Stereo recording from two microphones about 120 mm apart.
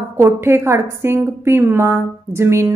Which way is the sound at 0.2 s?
20° right (ahead or behind).